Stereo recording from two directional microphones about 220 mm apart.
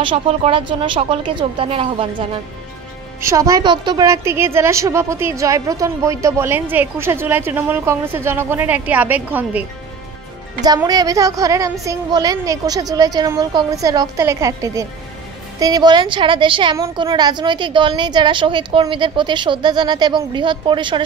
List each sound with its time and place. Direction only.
0.0 s a woman's voice: 25° right (ahead or behind)
3.2 s a woman's voice: 15° right (ahead or behind)
10.6 s a woman's voice: 15° right (ahead or behind)